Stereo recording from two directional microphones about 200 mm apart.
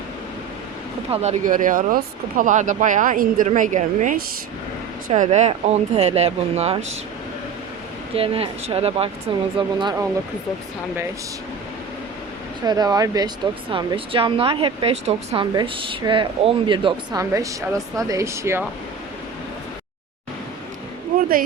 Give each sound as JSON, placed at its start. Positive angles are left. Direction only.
{"t": 1.1, "sound": "speech", "side_deg": -35}
{"t": 8.1, "sound": "speech", "side_deg": -30}
{"t": 12.6, "sound": "speech", "side_deg": -20}
{"t": 21.2, "sound": "a sound", "side_deg": -45}